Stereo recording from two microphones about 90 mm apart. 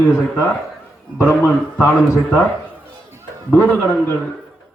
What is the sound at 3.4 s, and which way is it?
Speech, 15° left (ahead or behind).